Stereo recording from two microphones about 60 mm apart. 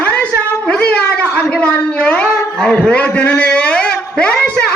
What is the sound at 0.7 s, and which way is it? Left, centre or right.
Shofar, left.